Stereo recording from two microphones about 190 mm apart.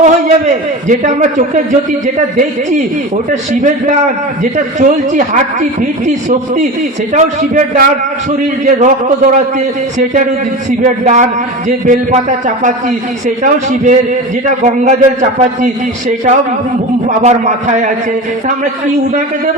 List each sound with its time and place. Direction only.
0.0 s a man's voice: 40° right (ahead or behind)
7.1 s a man's voice: 40° right (ahead or behind)
10.7 s a man's voice: 40° right (ahead or behind)
13.2 s a man's voice: 40° right (ahead or behind)